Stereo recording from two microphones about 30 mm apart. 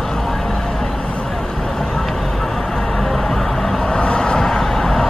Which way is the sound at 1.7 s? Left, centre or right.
Centre.